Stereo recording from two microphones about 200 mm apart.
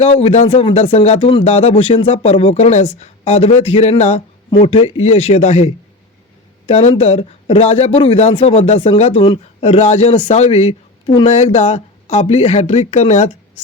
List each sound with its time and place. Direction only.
0.0 s speech: 30° left (ahead or behind)